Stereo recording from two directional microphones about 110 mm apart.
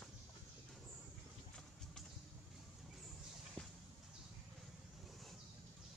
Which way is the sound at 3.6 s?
10° left (ahead or behind).